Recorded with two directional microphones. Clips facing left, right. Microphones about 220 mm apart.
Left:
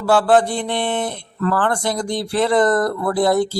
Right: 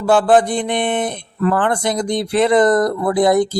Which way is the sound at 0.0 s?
20° right (ahead or behind).